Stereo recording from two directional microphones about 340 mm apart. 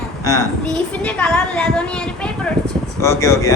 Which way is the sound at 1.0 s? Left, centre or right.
Centre.